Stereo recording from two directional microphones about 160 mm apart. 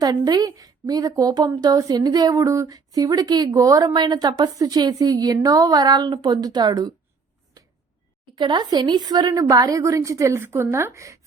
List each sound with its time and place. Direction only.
0.0 s a woman's voice: 25° right (ahead or behind)
8.4 s a woman's voice: 30° right (ahead or behind)